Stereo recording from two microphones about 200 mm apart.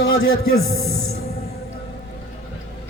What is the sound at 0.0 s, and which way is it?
A man's voice, 80° left.